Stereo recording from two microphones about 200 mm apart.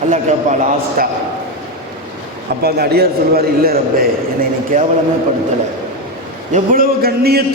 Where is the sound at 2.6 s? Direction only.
50° right (ahead or behind).